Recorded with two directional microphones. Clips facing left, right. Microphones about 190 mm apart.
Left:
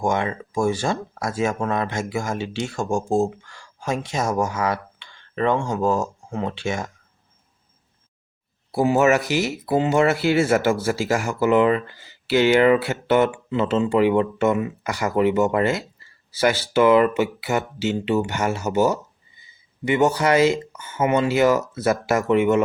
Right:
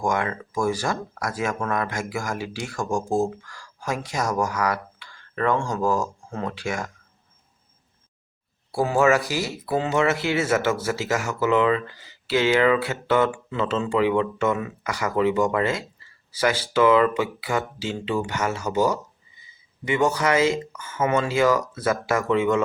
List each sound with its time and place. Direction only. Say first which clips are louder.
0.0 s speech: left 2 dB; 25° left (ahead or behind)
8.7 s speech: left 2 dB; 20° left (ahead or behind)